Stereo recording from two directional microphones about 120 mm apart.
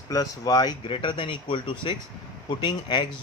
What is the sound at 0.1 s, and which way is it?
Speech, 30° left (ahead or behind).